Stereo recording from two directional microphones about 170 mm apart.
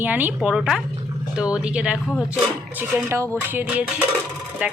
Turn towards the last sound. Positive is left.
turn(degrees=-10)  # may be behind; listen again after turning